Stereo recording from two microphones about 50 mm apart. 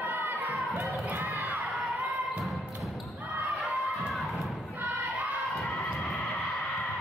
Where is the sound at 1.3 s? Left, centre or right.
Right.